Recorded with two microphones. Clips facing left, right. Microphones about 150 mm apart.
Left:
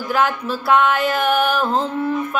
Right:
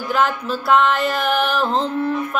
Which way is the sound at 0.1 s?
5° left (ahead or behind).